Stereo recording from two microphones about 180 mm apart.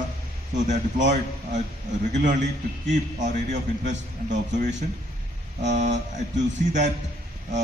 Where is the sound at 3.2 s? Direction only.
45° right (ahead or behind).